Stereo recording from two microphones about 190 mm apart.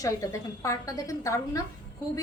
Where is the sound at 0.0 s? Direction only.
15° left (ahead or behind).